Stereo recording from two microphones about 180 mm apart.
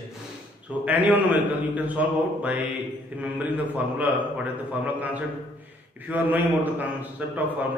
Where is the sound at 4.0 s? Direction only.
10° right (ahead or behind).